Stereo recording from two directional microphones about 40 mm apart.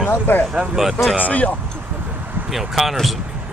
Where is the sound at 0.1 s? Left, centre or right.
Left.